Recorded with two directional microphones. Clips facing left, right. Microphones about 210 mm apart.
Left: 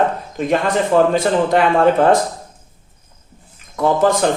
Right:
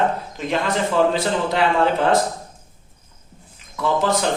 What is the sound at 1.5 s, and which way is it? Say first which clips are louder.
Speech: left 4 dB; 50° left (ahead or behind).